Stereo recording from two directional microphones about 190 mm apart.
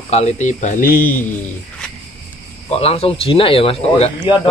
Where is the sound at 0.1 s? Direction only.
35° left (ahead or behind).